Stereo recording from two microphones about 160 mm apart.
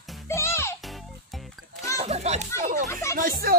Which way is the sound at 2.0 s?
45° right (ahead or behind).